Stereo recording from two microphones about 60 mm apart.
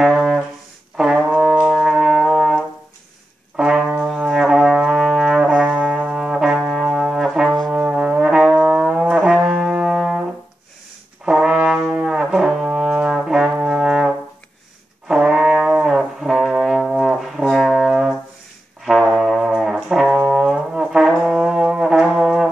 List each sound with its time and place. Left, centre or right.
0.0 s music: centre
0.9 s brass instrument: centre
5.6 s brass instrument: right
6.1 s trombone: centre
6.8 s brass instrument: centre
8.5 s music: centre
9.4 s brass instrument: right
9.8 s brass instrument: centre
11.2 s brass instrument: centre
15.1 s brass instrument: centre